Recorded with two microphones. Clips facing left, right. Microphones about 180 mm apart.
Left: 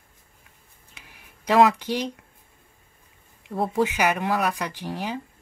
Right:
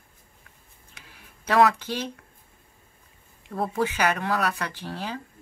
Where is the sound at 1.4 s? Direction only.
15° left (ahead or behind).